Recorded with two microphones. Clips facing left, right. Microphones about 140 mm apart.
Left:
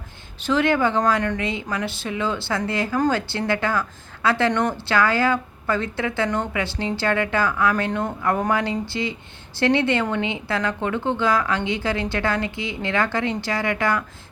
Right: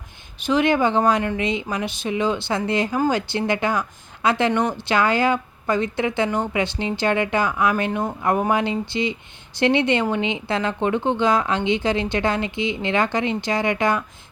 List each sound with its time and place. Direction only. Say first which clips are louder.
0.4 s a woman's voice: right 1 dB; 15° right (ahead or behind)